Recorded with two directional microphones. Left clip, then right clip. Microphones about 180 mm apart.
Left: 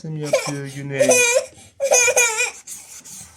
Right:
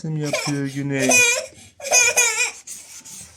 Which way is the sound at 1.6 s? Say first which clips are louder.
Left 2 dB; 65° left (ahead or behind).